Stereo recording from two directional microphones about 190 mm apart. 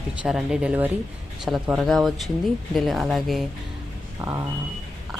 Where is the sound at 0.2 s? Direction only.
5° right (ahead or behind).